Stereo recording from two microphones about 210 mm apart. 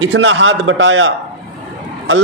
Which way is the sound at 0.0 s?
65° right (ahead or behind).